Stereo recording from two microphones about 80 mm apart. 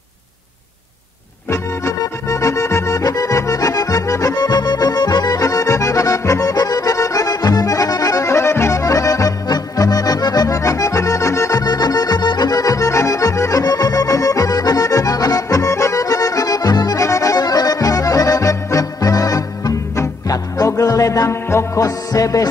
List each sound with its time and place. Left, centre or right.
1.5 s music: left
3.0 s accordion: left
11.6 s accordion: left
17.0 s accordion: left
21.5 s music: left